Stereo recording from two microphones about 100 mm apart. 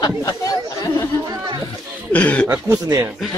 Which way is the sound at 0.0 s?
40° left (ahead or behind).